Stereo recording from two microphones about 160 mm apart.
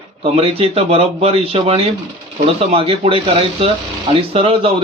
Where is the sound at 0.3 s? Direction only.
35° right (ahead or behind).